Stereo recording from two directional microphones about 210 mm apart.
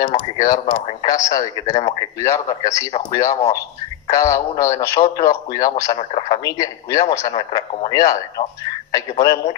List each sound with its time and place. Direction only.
0.0 s speech: 20° left (ahead or behind)